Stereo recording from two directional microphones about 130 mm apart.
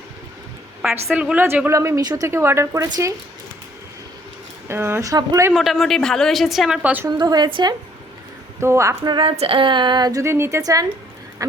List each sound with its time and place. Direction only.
1.1 s a woman's voice: 10° right (ahead or behind); by 3.2 s 25° right (ahead or behind)
4.7 s a woman's voice: 20° right (ahead or behind)
5.5 s a woman's voice: centre (ahead or behind)
7.2 s a woman's voice: 35° right (ahead or behind)
8.6 s a woman's voice: 20° right (ahead or behind)
9.0 s a woman's voice: 40° right (ahead or behind)